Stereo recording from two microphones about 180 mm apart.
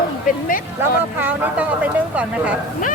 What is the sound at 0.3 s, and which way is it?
Speech, 50° left (ahead or behind).